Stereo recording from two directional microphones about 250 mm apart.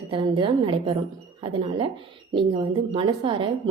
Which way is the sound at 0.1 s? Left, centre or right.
Centre.